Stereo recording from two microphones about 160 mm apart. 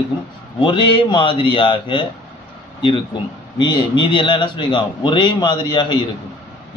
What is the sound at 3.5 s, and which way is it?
A man's voice, 30° left (ahead or behind).